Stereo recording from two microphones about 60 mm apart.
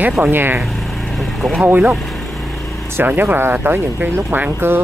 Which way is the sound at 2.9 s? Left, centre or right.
Right.